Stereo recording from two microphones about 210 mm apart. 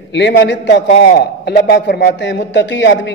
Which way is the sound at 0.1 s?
55° left (ahead or behind).